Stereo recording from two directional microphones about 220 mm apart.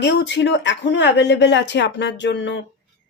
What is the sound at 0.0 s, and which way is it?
Speech, 55° left (ahead or behind).